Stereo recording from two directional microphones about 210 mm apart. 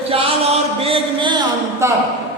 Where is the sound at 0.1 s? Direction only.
25° right (ahead or behind).